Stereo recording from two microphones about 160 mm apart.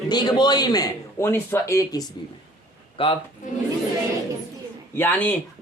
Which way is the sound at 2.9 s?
35° left (ahead or behind).